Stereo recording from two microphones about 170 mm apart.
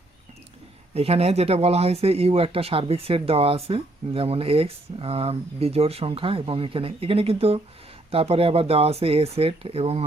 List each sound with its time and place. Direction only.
0.9 s speech: 35° right (ahead or behind)